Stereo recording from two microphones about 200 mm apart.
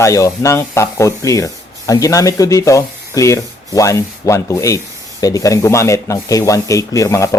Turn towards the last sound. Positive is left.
turn(degrees=15)  # may be behind; listen again after turning